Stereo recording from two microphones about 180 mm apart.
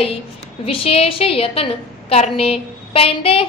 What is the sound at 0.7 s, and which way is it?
A woman's voice, 30° left (ahead or behind).